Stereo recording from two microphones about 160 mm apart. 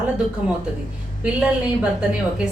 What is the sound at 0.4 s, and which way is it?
A woman's voice, 5° right (ahead or behind).